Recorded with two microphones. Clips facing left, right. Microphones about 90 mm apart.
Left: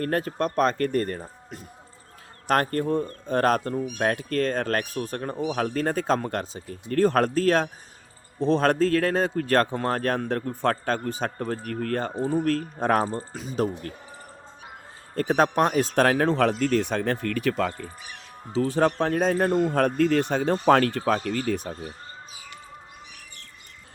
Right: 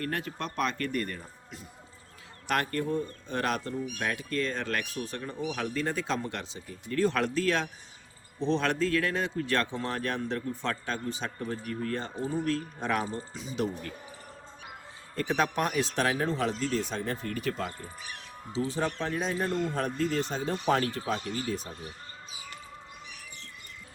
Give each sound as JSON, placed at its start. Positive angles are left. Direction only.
{"t": 0.0, "sound": "speech", "side_deg": 40}
{"t": 12.1, "sound": "speech", "side_deg": 45}
{"t": 15.1, "sound": "speech", "side_deg": 45}
{"t": 18.5, "sound": "speech", "side_deg": 55}